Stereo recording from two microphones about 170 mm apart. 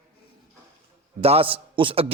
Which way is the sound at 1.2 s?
35° right (ahead or behind).